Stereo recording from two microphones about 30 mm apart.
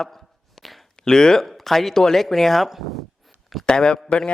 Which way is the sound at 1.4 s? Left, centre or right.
Centre.